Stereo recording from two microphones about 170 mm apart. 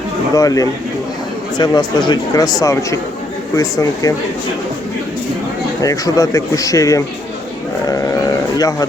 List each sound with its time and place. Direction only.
0.3 s speech: 20° left (ahead or behind)
5.8 s speech: 20° left (ahead or behind)
7.9 s sheep: 20° left (ahead or behind)
8.5 s speech: 20° left (ahead or behind)